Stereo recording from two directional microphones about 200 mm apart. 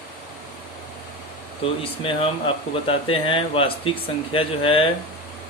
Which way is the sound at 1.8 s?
25° left (ahead or behind).